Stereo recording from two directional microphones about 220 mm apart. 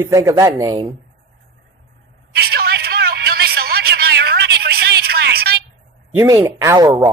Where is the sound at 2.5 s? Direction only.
45° right (ahead or behind).